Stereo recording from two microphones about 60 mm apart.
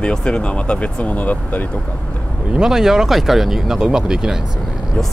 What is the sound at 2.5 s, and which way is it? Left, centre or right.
Speech, centre.